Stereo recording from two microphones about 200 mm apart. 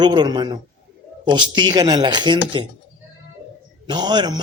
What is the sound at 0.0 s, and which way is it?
A man's voice, 20° right (ahead or behind).